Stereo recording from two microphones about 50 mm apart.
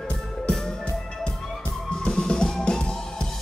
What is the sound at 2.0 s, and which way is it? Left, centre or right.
Music, centre.